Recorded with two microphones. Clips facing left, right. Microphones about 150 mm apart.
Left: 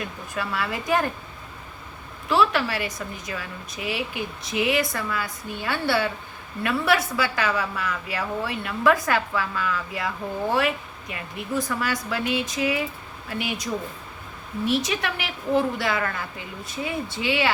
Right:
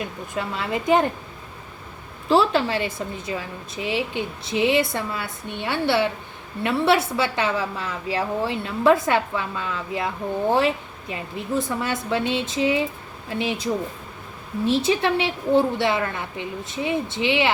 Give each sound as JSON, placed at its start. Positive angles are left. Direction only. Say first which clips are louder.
{"t": 0.0, "sound": "a woman's voice", "louder": "right 2 dB", "side_deg": -20}
{"t": 2.3, "sound": "a woman's voice", "louder": "right 3 dB", "side_deg": -30}
{"t": 14.7, "sound": "a woman's voice", "louder": "right 6 dB", "side_deg": -30}